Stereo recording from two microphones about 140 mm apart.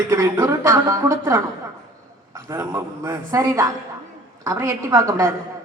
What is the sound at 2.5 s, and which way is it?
A woman's voice, 20° right (ahead or behind).